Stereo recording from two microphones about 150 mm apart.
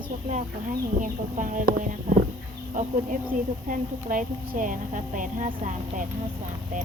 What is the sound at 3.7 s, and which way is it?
A woman's voice, 60° right (ahead or behind).